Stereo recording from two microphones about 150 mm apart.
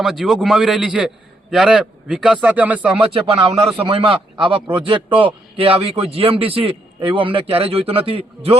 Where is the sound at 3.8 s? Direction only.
35° right (ahead or behind).